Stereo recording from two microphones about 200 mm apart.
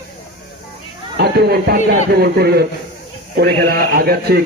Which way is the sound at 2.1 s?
50° right (ahead or behind).